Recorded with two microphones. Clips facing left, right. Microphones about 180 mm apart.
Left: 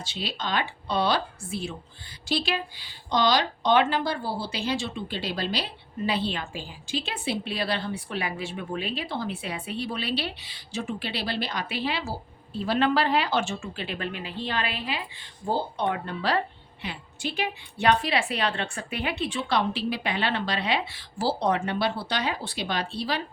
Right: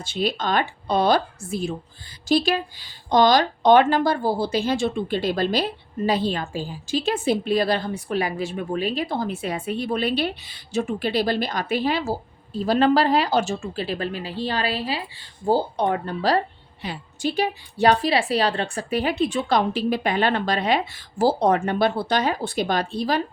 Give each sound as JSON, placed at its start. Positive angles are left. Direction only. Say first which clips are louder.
{"t": 0.0, "sound": "speech", "louder": "right 8 dB", "side_deg": -50}